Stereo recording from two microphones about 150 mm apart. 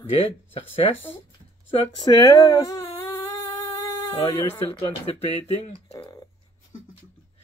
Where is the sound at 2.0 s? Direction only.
25° left (ahead or behind).